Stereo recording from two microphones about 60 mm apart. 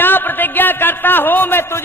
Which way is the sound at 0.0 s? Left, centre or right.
Left.